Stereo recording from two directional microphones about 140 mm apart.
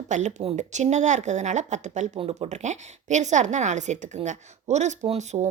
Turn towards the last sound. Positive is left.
turn(degrees=-55)  # may be behind; listen again after turning